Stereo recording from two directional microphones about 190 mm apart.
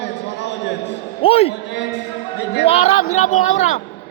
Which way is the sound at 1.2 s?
30° left (ahead or behind).